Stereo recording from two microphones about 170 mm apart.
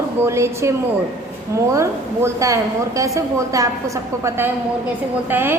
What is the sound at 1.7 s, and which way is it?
A woman's voice, 15° right (ahead or behind).